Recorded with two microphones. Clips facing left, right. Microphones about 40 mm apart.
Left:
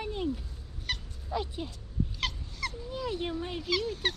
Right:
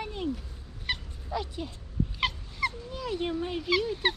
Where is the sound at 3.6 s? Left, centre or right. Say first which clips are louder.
Right 4 dB; centre.